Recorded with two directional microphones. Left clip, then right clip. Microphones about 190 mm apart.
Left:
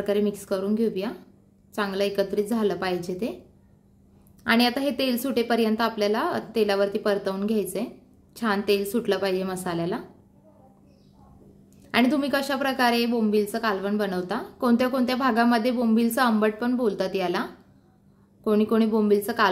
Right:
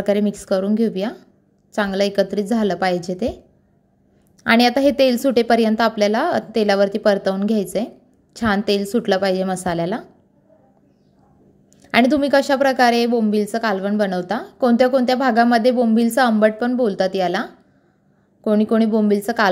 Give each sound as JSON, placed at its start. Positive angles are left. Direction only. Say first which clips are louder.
{"t": 0.0, "sound": "a woman's voice", "louder": "right 5 dB", "side_deg": -35}
{"t": 4.4, "sound": "a woman's voice", "louder": "right 8 dB", "side_deg": -35}
{"t": 11.8, "sound": "a woman's voice", "louder": "right 7 dB", "side_deg": -30}